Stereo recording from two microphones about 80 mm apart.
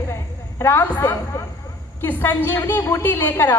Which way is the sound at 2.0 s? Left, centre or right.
Left.